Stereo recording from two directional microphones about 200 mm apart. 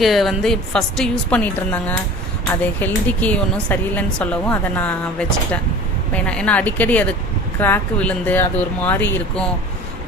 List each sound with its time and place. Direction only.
0.0 s a woman's voice: centre (ahead or behind)
6.1 s speech: 5° left (ahead or behind)